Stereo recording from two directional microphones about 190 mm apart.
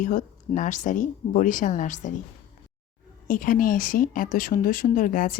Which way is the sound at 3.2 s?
45° left (ahead or behind).